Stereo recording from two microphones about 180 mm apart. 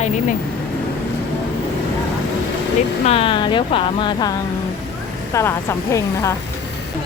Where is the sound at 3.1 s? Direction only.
30° left (ahead or behind).